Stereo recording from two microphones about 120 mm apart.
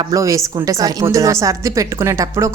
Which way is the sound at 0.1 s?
25° right (ahead or behind).